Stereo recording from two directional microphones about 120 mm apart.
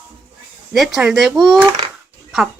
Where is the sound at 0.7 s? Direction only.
Centre (ahead or behind).